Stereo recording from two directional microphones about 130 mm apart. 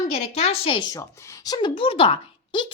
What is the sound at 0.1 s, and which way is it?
Speech, 50° left (ahead or behind).